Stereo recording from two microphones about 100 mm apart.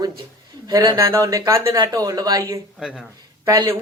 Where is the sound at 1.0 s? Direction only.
30° right (ahead or behind).